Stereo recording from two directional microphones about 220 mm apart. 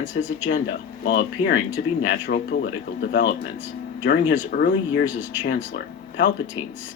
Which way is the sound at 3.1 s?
55° left (ahead or behind).